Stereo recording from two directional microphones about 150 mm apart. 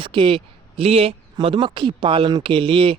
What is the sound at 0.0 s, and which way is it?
Speech, 35° right (ahead or behind).